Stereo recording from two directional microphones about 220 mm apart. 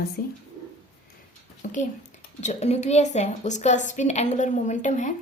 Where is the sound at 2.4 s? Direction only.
30° left (ahead or behind).